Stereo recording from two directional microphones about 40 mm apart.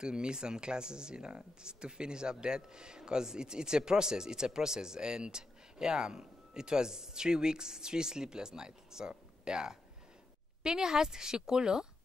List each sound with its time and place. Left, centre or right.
0.0 s a woman's voice: right